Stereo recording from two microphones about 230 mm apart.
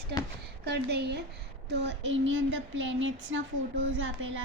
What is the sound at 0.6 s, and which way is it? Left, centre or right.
A woman's voice, right.